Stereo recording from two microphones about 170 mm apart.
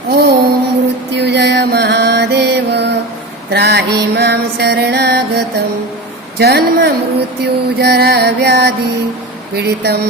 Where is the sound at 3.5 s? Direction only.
75° right (ahead or behind).